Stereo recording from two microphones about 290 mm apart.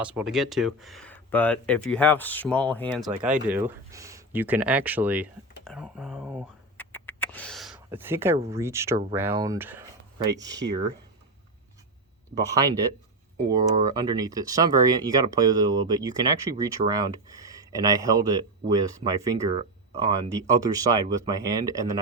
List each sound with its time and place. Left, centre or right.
0.0 s speech: centre
6.7 s a sound: centre
8.4 s speech: centre
10.6 s speech: right
12.3 s speech: centre